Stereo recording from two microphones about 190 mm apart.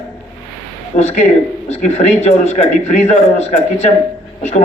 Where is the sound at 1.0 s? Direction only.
35° left (ahead or behind).